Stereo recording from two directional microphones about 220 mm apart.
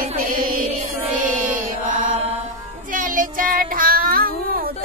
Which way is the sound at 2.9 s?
35° right (ahead or behind).